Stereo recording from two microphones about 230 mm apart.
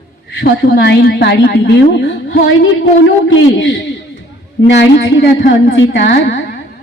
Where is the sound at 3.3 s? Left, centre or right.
Left.